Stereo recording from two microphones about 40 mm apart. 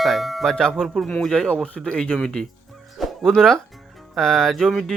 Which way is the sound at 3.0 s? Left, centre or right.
Centre.